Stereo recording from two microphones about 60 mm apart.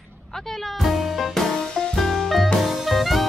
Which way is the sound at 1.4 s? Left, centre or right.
Centre.